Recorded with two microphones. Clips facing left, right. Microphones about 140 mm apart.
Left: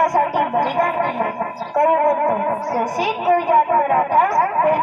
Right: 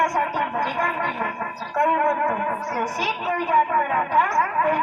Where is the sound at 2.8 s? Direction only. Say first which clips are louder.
Left 6 dB; 50° left (ahead or behind).